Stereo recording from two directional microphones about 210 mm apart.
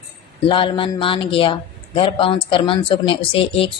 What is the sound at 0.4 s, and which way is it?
Speech, 25° left (ahead or behind).